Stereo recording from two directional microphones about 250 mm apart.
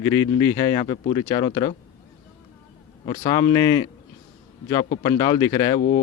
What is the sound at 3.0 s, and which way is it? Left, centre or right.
Speech, left.